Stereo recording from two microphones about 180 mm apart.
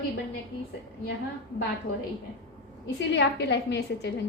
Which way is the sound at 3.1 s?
75° left (ahead or behind).